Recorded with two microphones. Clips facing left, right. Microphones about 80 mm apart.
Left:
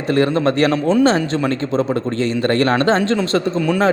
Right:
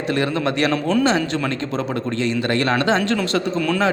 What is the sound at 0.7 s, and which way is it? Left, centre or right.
Speech, left.